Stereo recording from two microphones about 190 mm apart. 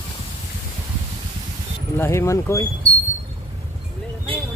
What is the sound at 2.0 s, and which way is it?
Speech, 15° left (ahead or behind).